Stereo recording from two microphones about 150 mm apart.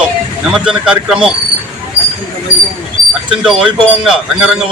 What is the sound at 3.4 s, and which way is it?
Speech, 5° right (ahead or behind).